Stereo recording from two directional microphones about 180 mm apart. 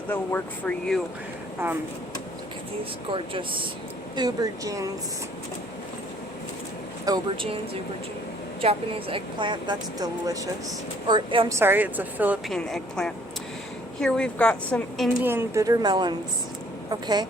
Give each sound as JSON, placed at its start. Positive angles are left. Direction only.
{"t": 0.1, "sound": "speech", "side_deg": 10}
{"t": 1.6, "sound": "a woman's voice", "side_deg": -10}
{"t": 3.1, "sound": "speech", "side_deg": -30}
{"t": 7.0, "sound": "speech", "side_deg": -25}
{"t": 11.5, "sound": "a woman's voice", "side_deg": -10}
{"t": 12.5, "sound": "a woman's voice", "side_deg": 0}
{"t": 15.2, "sound": "speech", "side_deg": -10}